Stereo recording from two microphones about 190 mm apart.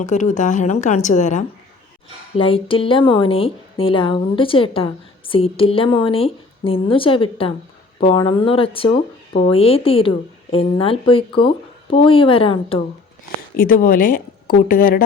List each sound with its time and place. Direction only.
0.0 s a woman's voice: 40° left (ahead or behind)
2.3 s a woman's voice: 30° left (ahead or behind)
13.6 s a woman's voice: 50° left (ahead or behind)